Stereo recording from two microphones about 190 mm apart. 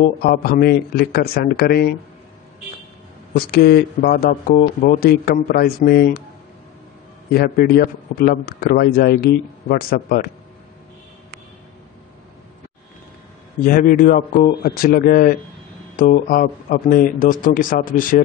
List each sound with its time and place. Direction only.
0.2 s a man's voice: 50° left (ahead or behind)
3.3 s a man's voice: 55° left (ahead or behind)
7.3 s a man's voice: 55° left (ahead or behind)
13.7 s a man's voice: 45° left (ahead or behind)